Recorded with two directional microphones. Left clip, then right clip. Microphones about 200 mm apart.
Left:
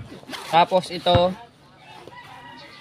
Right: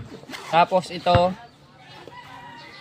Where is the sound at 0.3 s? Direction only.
35° left (ahead or behind).